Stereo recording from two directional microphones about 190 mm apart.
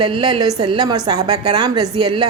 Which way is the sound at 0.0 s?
25° right (ahead or behind).